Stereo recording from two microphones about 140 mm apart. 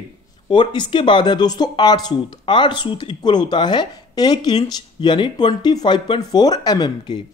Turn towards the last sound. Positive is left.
turn(degrees=30)  # may be behind; listen again after turning